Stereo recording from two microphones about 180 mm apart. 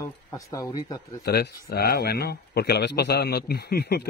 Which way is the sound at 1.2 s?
60° left (ahead or behind).